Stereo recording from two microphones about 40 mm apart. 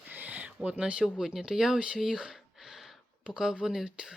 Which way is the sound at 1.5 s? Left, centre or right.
Centre.